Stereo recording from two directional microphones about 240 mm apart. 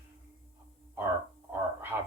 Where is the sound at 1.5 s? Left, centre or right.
Centre.